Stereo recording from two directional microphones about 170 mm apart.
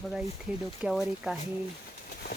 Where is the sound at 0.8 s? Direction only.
Centre (ahead or behind).